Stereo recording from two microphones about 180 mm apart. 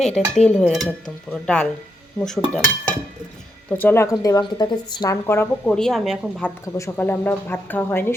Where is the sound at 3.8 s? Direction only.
10° left (ahead or behind).